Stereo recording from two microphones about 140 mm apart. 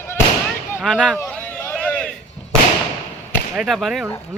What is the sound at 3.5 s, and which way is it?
Speech, centre (ahead or behind).